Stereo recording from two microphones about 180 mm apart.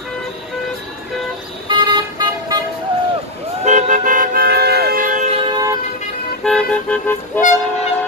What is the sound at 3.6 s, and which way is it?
Toot, 45° right (ahead or behind).